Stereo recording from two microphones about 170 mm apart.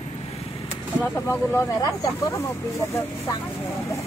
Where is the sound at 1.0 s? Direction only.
10° left (ahead or behind).